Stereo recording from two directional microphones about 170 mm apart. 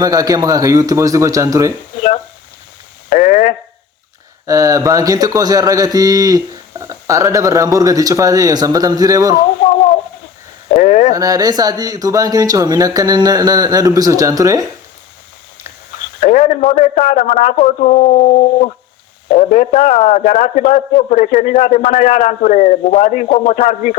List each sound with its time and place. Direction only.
0.0 s speech: 20° right (ahead or behind)
3.1 s radio: 45° left (ahead or behind)
4.4 s speech: 20° right (ahead or behind)
10.7 s a sound: 45° left (ahead or behind)
11.1 s speech: 20° right (ahead or behind)
16.2 s a man's voice: 45° left (ahead or behind)
23.6 s a man's voice: 50° left (ahead or behind)